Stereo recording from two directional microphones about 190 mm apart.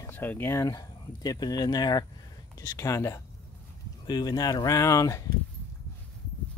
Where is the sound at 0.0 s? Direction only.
10° left (ahead or behind).